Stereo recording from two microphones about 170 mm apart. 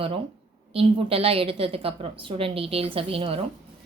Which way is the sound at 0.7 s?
35° right (ahead or behind).